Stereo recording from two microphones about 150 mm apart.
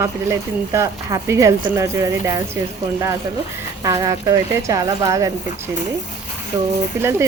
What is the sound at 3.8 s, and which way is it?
Speech, 20° right (ahead or behind).